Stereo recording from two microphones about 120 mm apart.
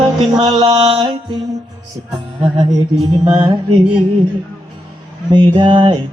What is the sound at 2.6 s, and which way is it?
Mantra, 35° right (ahead or behind).